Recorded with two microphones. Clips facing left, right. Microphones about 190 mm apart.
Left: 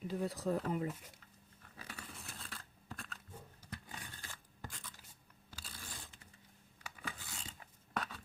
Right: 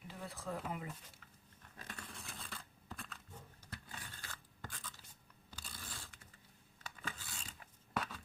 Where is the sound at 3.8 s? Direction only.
15° left (ahead or behind).